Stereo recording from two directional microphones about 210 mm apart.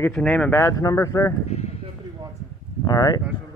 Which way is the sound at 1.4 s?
30° left (ahead or behind).